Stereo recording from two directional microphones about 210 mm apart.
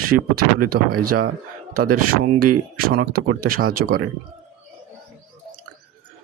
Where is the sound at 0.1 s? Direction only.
45° right (ahead or behind).